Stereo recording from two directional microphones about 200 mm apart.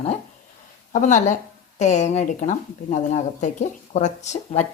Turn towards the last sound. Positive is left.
turn(degrees=35)  # may be behind; listen again after turning